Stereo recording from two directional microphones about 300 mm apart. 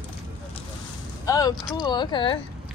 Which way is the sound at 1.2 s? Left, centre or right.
Centre.